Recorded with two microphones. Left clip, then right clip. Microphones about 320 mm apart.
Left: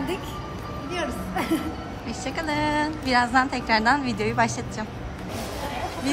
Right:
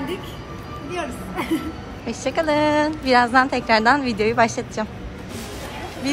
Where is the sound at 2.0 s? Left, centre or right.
Centre.